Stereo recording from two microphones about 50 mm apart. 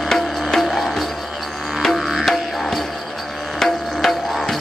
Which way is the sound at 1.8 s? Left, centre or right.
Centre.